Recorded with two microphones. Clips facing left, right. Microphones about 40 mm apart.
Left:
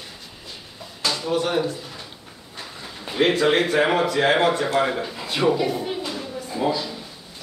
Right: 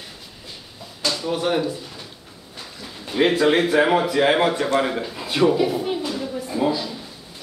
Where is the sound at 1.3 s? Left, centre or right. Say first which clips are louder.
Even; centre.